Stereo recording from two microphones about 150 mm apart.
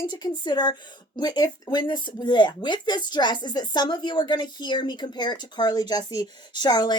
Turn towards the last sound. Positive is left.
turn(degrees=30)  # may be behind; listen again after turning